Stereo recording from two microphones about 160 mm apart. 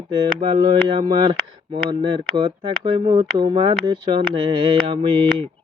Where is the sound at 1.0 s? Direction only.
30° right (ahead or behind).